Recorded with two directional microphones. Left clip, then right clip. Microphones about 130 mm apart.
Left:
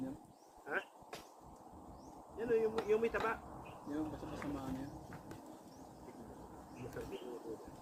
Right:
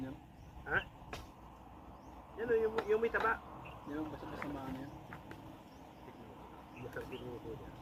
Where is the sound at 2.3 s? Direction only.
25° left (ahead or behind).